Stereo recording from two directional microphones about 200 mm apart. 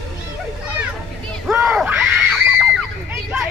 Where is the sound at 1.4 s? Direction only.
5° right (ahead or behind).